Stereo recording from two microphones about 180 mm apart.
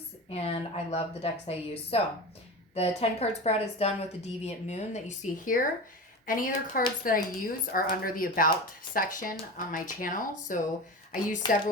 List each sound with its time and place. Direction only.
0.3 s a woman's voice: 35° left (ahead or behind)
11.4 s a woman's voice: 25° left (ahead or behind)